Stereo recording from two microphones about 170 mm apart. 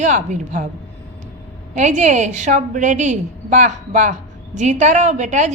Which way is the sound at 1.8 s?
45° right (ahead or behind).